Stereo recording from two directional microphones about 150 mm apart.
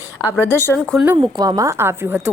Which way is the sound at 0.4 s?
15° left (ahead or behind).